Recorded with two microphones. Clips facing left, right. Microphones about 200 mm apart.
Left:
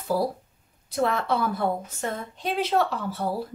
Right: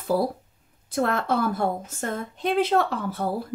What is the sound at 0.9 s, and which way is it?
A woman's voice, 50° right (ahead or behind).